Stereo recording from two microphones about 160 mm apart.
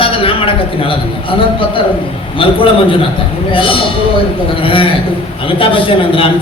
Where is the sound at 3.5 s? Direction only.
35° left (ahead or behind).